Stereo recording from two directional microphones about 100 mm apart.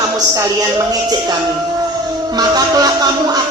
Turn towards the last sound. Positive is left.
turn(degrees=-40)  # may be behind; listen again after turning